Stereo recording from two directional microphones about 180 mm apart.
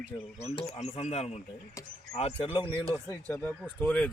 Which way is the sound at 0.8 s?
40° left (ahead or behind).